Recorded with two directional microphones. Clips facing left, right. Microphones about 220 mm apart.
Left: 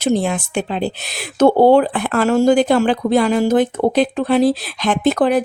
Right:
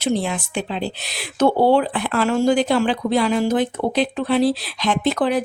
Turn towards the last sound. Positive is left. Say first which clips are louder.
# left 4 dB
turn(degrees=50)  # may be behind; listen again after turning